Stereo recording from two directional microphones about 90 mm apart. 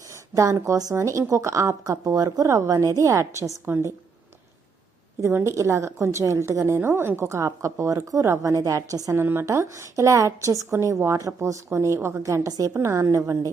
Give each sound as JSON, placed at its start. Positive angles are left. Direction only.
{"t": 0.1, "sound": "a woman's voice", "side_deg": -35}
{"t": 5.2, "sound": "a woman's voice", "side_deg": -30}
{"t": 9.2, "sound": "a woman's voice", "side_deg": -30}
{"t": 12.2, "sound": "a woman's voice", "side_deg": -35}